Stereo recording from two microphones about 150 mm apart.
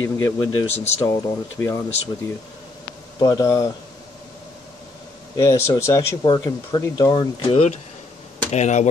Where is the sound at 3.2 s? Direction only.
25° left (ahead or behind).